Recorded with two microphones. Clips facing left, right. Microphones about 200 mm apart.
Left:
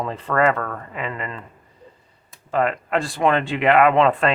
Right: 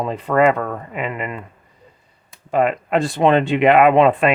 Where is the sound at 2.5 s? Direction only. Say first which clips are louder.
Right 3 dB; 15° right (ahead or behind).